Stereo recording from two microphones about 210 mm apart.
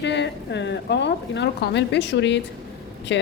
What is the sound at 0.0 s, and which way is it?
Speech, 55° left (ahead or behind).